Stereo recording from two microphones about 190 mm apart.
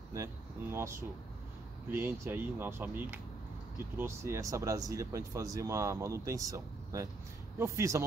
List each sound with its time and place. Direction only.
0.1 s speech: 15° right (ahead or behind)